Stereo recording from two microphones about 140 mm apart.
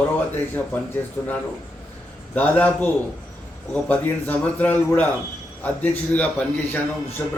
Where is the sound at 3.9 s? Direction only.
10° left (ahead or behind).